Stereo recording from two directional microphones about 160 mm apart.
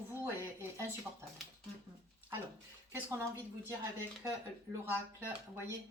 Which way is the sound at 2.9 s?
15° right (ahead or behind).